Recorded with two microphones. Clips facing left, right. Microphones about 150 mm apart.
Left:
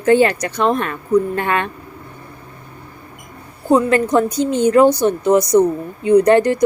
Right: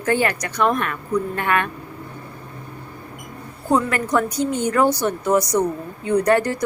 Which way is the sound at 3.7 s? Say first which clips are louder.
Left 6 dB; 25° left (ahead or behind).